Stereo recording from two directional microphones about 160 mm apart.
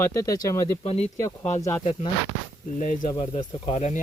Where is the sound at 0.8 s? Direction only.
40° left (ahead or behind).